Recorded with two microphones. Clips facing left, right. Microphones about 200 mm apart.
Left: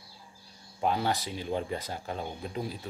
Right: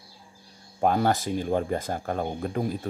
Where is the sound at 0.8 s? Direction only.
50° right (ahead or behind).